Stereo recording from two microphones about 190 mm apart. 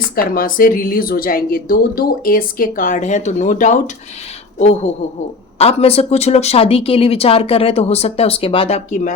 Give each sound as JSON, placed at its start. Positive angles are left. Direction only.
{"t": 0.2, "sound": "speech", "side_deg": 50}